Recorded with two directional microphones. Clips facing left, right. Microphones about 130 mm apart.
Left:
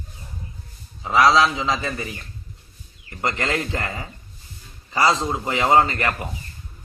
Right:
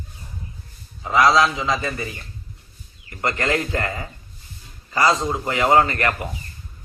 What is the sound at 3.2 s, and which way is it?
Speech, 20° left (ahead or behind).